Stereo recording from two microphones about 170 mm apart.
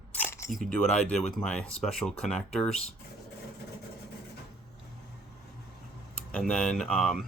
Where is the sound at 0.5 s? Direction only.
5° left (ahead or behind).